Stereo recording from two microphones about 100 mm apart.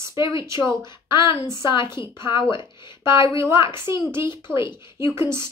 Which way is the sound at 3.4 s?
25° right (ahead or behind).